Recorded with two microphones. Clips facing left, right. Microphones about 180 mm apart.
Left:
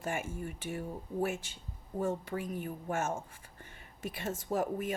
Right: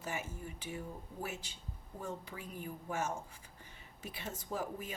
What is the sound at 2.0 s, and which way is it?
Speech, 50° left (ahead or behind).